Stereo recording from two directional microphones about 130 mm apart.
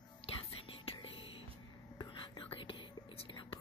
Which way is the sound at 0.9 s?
45° left (ahead or behind).